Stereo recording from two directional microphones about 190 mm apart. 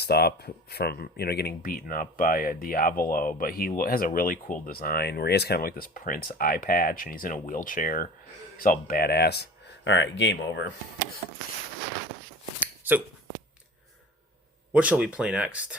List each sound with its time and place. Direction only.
0.0 s speech: 55° left (ahead or behind)
12.5 s a sound: 10° right (ahead or behind)
14.7 s speech: 5° right (ahead or behind)